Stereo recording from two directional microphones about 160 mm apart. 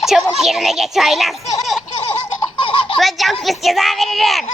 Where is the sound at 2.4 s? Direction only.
35° left (ahead or behind).